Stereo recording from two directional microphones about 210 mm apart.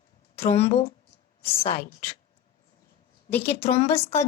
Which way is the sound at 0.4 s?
30° left (ahead or behind).